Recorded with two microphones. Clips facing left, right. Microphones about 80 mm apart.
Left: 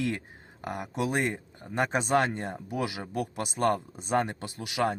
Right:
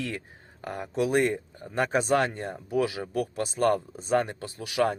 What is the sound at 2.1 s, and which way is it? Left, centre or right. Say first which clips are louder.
Speech: right 1 dB; left.